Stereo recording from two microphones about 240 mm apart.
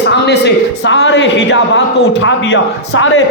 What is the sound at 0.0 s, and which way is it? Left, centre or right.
A man's voice, left.